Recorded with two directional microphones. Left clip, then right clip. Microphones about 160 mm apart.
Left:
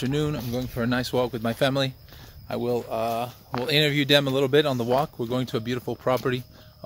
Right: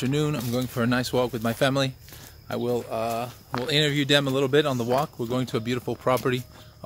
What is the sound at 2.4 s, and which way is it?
Speech, 20° left (ahead or behind).